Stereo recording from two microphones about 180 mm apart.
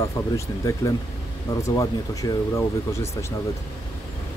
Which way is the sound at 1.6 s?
20° left (ahead or behind).